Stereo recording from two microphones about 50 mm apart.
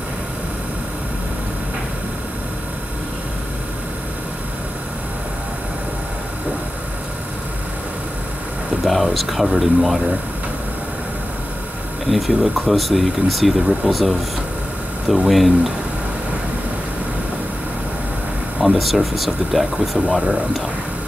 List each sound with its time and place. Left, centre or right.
8.8 s speech: centre
12.1 s speech: centre
15.2 s speech: centre
18.6 s speech: centre
20.1 s speech: right